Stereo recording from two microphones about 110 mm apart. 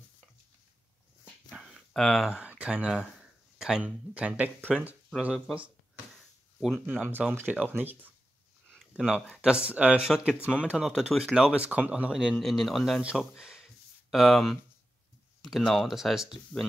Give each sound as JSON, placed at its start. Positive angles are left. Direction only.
{"t": 1.5, "sound": "speech", "side_deg": 0}
{"t": 6.6, "sound": "speech", "side_deg": 0}
{"t": 7.0, "sound": "speech", "side_deg": -15}
{"t": 8.9, "sound": "speech", "side_deg": -5}
{"t": 13.4, "sound": "a sound", "side_deg": -5}
{"t": 14.1, "sound": "speech", "side_deg": 0}